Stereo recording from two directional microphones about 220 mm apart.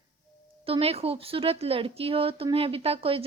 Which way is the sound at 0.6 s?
25° right (ahead or behind).